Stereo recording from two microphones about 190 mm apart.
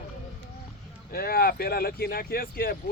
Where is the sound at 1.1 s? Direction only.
50° left (ahead or behind).